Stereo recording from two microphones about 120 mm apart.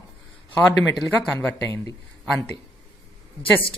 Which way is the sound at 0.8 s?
Centre (ahead or behind).